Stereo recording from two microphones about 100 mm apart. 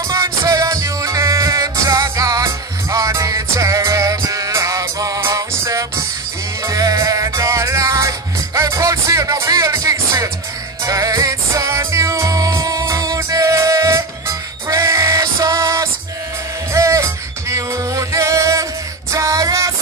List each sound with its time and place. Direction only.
0.1 s music: 30° right (ahead or behind)